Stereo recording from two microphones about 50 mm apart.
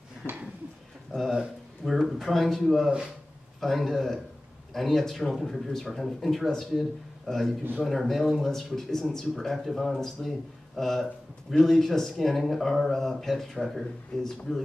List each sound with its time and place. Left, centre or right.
0.2 s speech: left
1.3 s a man's voice: centre